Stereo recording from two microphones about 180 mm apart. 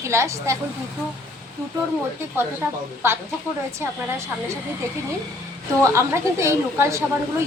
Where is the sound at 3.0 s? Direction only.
15° right (ahead or behind).